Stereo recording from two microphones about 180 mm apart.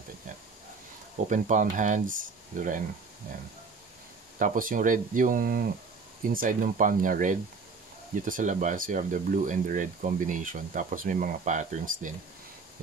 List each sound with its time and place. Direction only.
1.3 s speech: 45° right (ahead or behind)
4.4 s speech: 50° right (ahead or behind)